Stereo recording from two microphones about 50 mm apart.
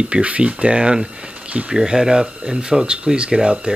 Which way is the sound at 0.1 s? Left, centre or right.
Right.